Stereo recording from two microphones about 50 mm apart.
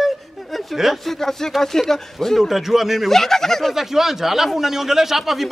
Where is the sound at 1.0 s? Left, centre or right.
Centre.